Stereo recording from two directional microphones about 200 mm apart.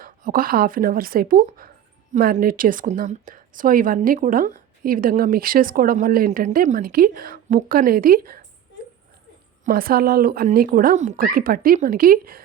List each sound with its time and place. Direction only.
0.0 s a woman's voice: 45° right (ahead or behind)
9.6 s a woman's voice: 45° right (ahead or behind)